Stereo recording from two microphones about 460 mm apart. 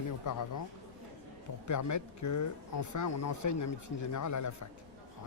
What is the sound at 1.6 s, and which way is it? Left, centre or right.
Speech, left.